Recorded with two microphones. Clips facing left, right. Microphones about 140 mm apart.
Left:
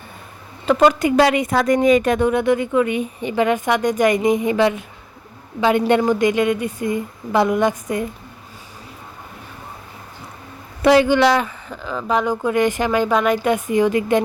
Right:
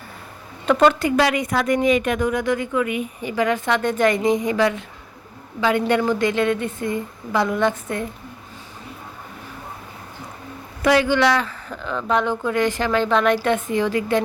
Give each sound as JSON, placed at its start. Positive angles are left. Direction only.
{"t": 0.6, "sound": "a woman's voice", "side_deg": 5}
{"t": 10.8, "sound": "speech", "side_deg": 20}
{"t": 11.7, "sound": "speech", "side_deg": 5}
{"t": 12.4, "sound": "a woman's voice", "side_deg": 20}